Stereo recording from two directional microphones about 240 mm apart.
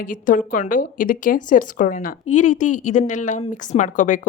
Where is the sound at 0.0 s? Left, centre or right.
Left.